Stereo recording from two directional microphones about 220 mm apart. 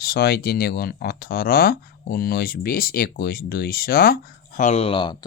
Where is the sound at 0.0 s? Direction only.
45° left (ahead or behind).